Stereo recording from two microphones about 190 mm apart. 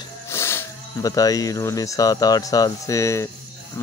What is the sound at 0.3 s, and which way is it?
Speech, 15° left (ahead or behind).